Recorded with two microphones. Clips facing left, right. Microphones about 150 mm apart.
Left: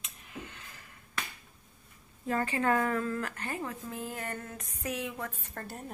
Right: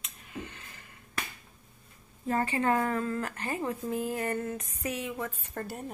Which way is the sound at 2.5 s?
20° right (ahead or behind).